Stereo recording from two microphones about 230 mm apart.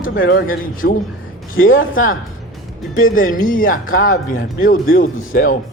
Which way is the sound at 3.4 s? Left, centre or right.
Left.